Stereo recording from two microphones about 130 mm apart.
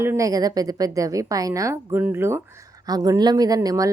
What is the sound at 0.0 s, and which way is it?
A woman's voice, 20° right (ahead or behind).